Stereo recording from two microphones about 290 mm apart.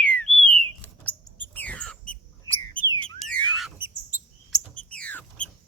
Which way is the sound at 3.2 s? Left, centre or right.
Centre.